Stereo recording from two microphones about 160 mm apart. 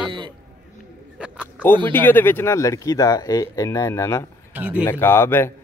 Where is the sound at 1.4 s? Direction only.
10° left (ahead or behind).